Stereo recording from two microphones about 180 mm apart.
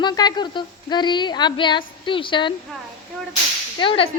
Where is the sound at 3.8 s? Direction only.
30° left (ahead or behind).